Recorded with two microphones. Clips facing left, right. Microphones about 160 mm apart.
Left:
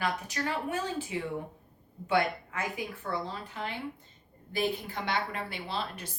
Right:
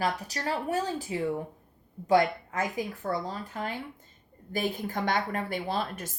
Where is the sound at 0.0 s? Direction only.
35° right (ahead or behind).